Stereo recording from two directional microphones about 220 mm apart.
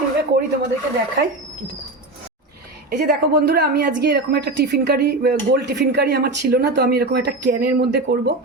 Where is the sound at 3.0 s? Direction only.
45° right (ahead or behind).